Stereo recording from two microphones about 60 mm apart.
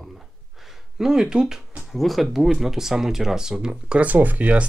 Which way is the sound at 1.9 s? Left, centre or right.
Centre.